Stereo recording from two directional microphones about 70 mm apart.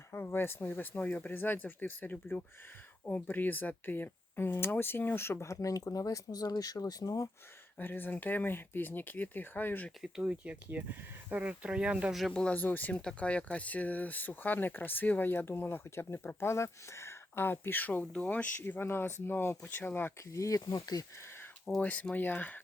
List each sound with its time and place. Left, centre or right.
0.1 s speech: left
7.8 s speech: left
10.0 s speech: centre
12.3 s speech: centre
20.3 s speech: left
21.8 s speech: left